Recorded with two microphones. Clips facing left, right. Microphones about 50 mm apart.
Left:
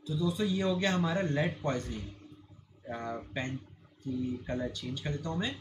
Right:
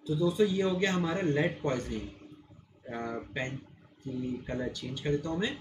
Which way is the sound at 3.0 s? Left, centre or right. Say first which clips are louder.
Right 1 dB; centre.